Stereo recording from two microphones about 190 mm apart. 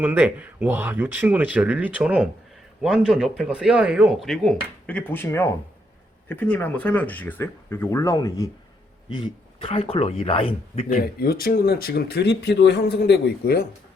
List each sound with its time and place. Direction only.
0.0 s speech: 10° right (ahead or behind); by 10.9 s 30° left (ahead or behind)
10.9 s speech: 50° left (ahead or behind)